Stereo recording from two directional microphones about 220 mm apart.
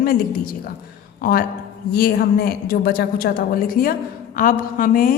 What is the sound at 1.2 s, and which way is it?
A woman's voice, 40° left (ahead or behind).